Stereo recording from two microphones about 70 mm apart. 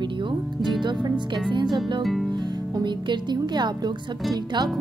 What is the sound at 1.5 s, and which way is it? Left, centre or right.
Speech, right.